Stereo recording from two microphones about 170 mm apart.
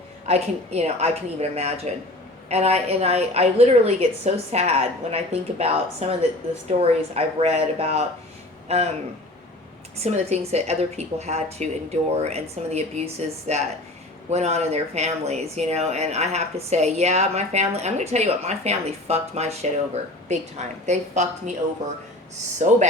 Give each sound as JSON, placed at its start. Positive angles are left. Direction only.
{"t": 0.3, "sound": "speech", "side_deg": -40}
{"t": 10.0, "sound": "a woman's voice", "side_deg": -40}